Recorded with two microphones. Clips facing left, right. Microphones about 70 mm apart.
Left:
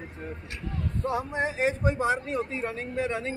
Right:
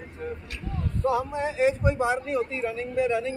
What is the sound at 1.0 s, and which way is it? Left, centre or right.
A man's voice, left.